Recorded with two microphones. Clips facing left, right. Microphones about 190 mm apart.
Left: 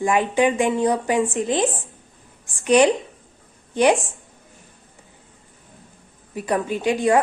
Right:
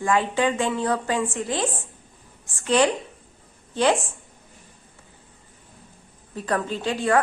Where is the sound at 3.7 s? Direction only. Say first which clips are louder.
Left 4 dB; 15° left (ahead or behind).